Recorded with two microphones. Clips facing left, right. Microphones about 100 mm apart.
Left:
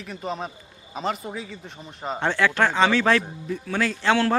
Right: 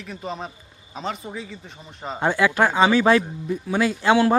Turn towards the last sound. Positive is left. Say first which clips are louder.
# right 3 dB
turn(degrees=-15)  # may be behind; listen again after turning